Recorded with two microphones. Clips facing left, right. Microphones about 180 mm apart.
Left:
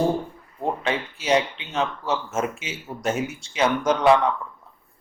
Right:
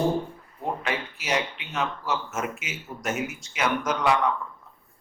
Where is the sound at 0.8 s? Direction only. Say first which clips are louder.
Left 4 dB; 30° left (ahead or behind).